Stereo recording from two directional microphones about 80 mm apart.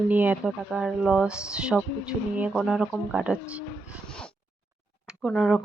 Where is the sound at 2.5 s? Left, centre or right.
Centre.